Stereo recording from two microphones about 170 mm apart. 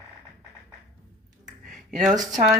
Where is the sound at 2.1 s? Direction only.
50° right (ahead or behind).